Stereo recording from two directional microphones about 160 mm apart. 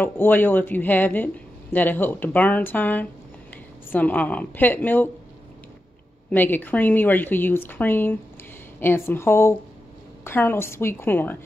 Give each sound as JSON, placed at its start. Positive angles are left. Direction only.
{"t": 0.0, "sound": "speech", "side_deg": 10}
{"t": 6.3, "sound": "speech", "side_deg": 10}